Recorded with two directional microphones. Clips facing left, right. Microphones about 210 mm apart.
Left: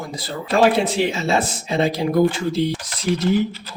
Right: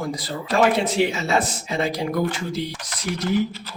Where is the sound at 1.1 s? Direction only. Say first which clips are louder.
Left 2 dB; 25° left (ahead or behind).